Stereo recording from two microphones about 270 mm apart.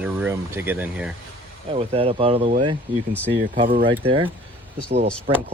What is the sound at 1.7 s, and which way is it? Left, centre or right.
Speech, right.